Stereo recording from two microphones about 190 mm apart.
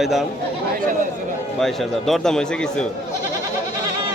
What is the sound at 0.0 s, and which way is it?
Speech, centre (ahead or behind).